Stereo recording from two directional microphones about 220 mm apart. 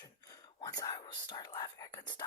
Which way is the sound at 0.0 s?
15° left (ahead or behind).